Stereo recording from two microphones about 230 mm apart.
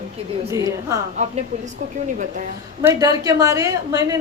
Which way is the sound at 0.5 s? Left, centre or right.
Centre.